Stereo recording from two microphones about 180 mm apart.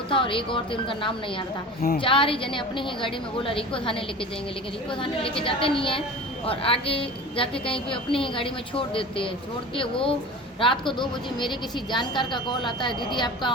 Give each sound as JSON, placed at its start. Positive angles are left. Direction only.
{"t": 0.1, "sound": "a woman's voice", "side_deg": 30}